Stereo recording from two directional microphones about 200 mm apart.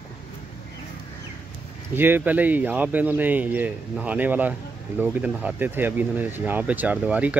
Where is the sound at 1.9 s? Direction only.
10° right (ahead or behind).